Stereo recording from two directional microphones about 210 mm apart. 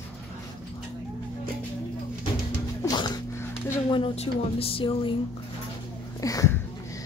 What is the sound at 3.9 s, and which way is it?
Speech, 25° left (ahead or behind).